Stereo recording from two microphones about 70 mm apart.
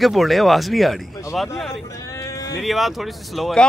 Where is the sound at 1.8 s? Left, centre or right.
Left.